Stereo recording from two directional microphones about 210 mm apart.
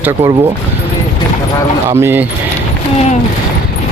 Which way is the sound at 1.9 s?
10° right (ahead or behind).